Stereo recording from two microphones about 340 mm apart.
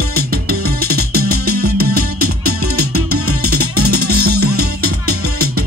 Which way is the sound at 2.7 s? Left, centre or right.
Right.